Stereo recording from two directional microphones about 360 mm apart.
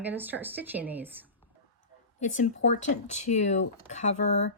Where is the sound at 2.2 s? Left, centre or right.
Centre.